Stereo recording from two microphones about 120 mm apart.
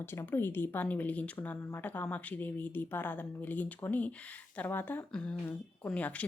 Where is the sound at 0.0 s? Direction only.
20° left (ahead or behind).